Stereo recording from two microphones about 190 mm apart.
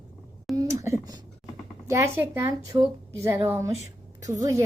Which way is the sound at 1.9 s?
15° right (ahead or behind).